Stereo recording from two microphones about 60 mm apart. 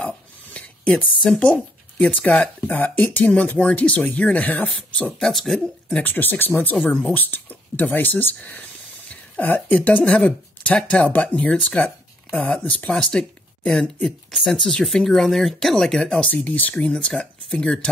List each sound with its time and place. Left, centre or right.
0.8 s speech: centre
1.4 s speech: left
3.3 s speech: left
5.2 s speech: centre
5.9 s speech: left
6.8 s speech: centre
7.2 s speech: left; by 13.3 s centre
14.5 s speech: centre
16.3 s speech: left